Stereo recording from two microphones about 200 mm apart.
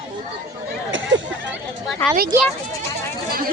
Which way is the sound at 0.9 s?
70° right (ahead or behind).